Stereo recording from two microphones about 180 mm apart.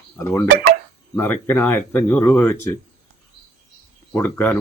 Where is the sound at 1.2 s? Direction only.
10° left (ahead or behind).